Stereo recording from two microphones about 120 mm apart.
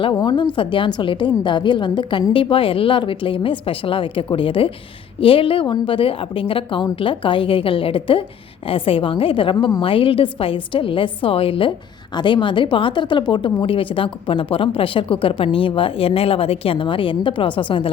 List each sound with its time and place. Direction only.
0.1 s a woman's voice: 35° left (ahead or behind)
0.5 s a woman's voice: 45° left (ahead or behind)